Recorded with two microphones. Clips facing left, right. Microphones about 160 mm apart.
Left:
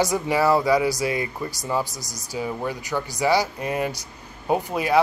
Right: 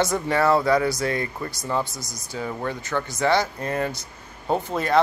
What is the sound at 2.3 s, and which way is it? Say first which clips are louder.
Speech: left 1 dB; 10° left (ahead or behind).